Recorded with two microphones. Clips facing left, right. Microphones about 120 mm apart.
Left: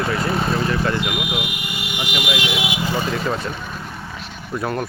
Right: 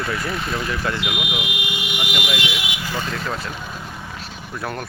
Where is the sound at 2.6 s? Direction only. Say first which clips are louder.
Left 5 dB; 25° left (ahead or behind).